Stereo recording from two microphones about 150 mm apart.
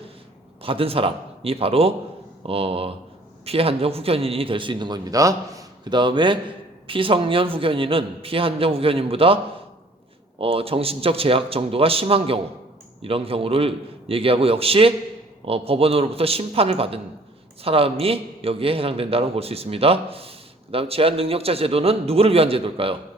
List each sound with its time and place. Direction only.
0.6 s a man's voice: 40° right (ahead or behind)